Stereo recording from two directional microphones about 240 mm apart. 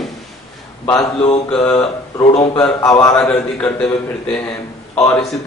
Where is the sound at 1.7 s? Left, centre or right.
Centre.